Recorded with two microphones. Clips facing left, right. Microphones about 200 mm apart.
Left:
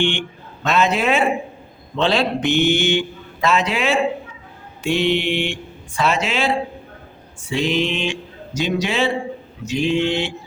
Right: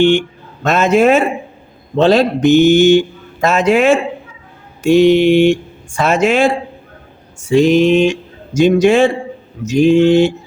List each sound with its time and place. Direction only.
0.0 s speech: 40° right (ahead or behind)